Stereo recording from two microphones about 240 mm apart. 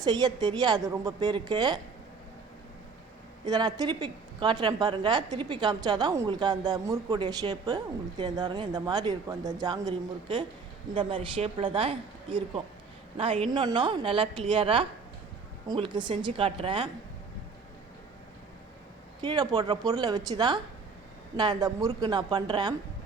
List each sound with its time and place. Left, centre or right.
0.0 s a woman's voice: centre
3.4 s a woman's voice: centre
19.2 s a woman's voice: centre